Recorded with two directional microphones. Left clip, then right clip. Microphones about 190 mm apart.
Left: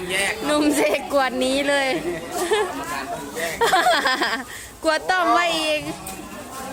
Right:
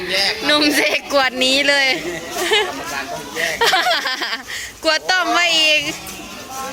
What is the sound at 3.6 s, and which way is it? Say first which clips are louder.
A woman's voice: right 1 dB; 15° left (ahead or behind).